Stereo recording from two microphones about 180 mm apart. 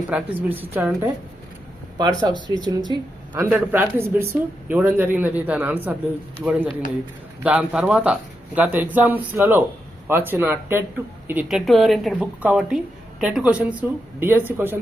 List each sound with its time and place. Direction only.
0.1 s speech: 10° right (ahead or behind)
2.0 s speech: 25° right (ahead or behind)